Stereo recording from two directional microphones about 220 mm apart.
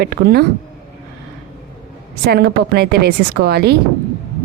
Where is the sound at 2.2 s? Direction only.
45° right (ahead or behind).